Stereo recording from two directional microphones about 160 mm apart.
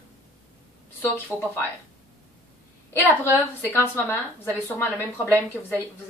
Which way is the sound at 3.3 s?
15° left (ahead or behind).